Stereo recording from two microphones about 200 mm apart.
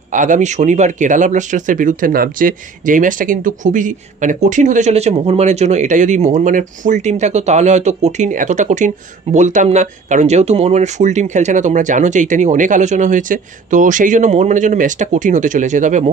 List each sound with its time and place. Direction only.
0.1 s speech: 40° right (ahead or behind)